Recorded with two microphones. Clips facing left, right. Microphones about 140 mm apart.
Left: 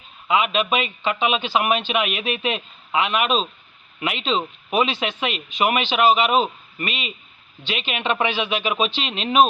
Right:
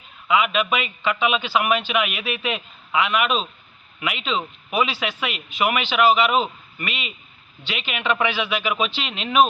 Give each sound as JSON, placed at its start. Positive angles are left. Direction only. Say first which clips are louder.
{"t": 0.3, "sound": "a man's voice", "louder": "even", "side_deg": 25}